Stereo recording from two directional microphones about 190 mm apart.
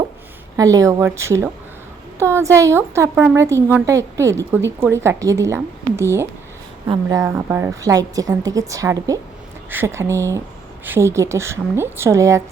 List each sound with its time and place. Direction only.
0.5 s a woman's voice: 20° right (ahead or behind)